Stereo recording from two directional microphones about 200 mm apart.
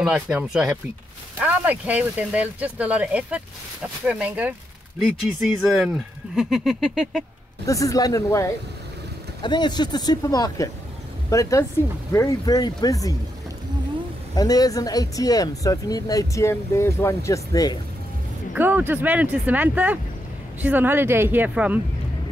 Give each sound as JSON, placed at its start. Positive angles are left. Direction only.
{"t": 0.0, "sound": "a sound", "side_deg": -5}
{"t": 1.4, "sound": "speech", "side_deg": -5}
{"t": 5.6, "sound": "a sound", "side_deg": -5}
{"t": 7.6, "sound": "speech", "side_deg": 15}
{"t": 14.3, "sound": "speech", "side_deg": 20}
{"t": 18.5, "sound": "speech", "side_deg": -10}